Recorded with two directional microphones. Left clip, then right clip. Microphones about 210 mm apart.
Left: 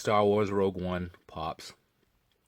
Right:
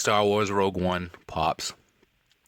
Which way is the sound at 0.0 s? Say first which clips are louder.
Right 3 dB; 35° right (ahead or behind).